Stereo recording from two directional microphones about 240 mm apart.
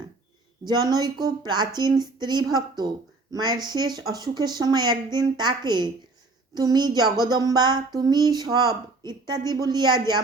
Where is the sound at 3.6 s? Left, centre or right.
Centre.